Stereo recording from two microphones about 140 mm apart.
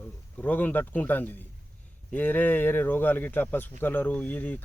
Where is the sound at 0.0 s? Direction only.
10° left (ahead or behind).